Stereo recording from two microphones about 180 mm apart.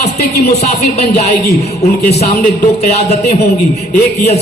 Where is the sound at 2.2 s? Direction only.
40° left (ahead or behind).